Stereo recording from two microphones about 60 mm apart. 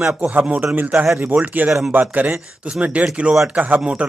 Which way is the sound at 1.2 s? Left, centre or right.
Right.